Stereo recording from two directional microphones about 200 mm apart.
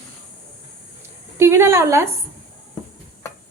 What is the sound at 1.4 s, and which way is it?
Speech, 15° right (ahead or behind).